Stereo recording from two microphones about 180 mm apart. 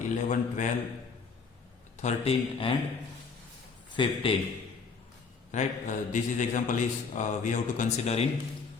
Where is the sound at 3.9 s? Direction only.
30° left (ahead or behind).